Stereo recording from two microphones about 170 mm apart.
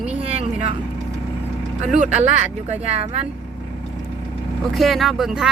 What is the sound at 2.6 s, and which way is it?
Speech, 35° right (ahead or behind).